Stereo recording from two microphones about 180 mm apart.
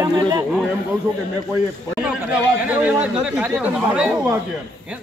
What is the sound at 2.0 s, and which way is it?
A man's voice, 5° right (ahead or behind).